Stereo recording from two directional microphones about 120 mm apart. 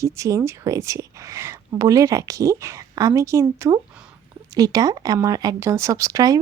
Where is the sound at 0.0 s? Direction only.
25° right (ahead or behind).